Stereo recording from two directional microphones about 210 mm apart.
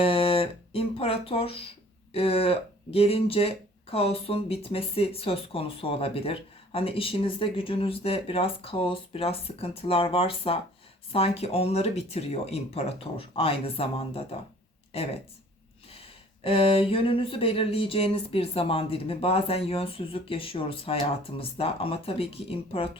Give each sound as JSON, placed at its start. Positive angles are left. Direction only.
{"t": 0.0, "sound": "speech", "side_deg": 25}
{"t": 16.4, "sound": "speech", "side_deg": 25}